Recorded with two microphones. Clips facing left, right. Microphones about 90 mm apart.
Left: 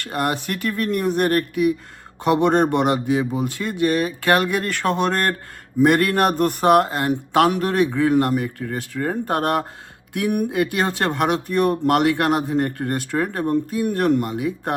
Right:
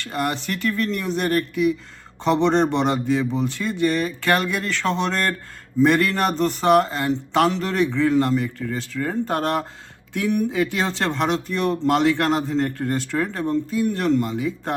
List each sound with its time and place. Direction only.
0.0 s speech: 50° left (ahead or behind)